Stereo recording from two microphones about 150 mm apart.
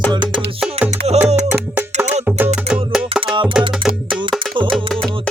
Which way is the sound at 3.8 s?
Centre (ahead or behind).